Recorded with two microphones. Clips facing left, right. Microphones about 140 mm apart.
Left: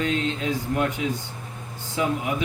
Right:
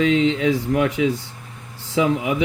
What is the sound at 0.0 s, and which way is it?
Speech, 90° right.